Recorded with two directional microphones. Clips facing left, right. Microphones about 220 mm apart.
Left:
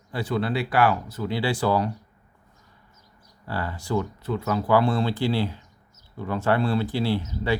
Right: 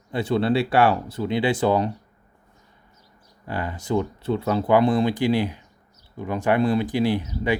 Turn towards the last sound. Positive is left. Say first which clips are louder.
# right 2 dB
turn(degrees=-15)  # may be behind; listen again after turning